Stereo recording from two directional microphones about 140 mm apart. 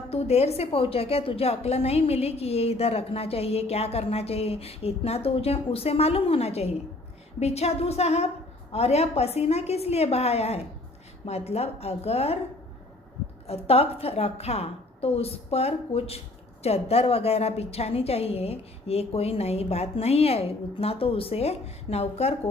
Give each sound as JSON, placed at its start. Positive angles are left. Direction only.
{"t": 0.1, "sound": "a woman's voice", "side_deg": 50}
{"t": 13.5, "sound": "a woman's voice", "side_deg": 45}